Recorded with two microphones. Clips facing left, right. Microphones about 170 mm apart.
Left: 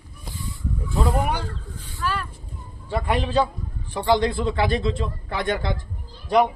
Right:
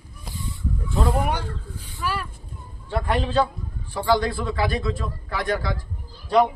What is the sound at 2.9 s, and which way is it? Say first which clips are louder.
A man's voice: even; 10° left (ahead or behind).